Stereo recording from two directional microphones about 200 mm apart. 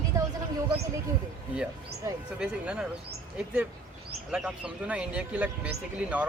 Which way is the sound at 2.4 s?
5° right (ahead or behind).